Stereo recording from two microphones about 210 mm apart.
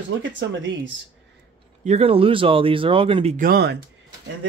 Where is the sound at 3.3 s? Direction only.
45° right (ahead or behind).